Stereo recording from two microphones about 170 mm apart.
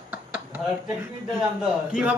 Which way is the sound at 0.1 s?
10° right (ahead or behind).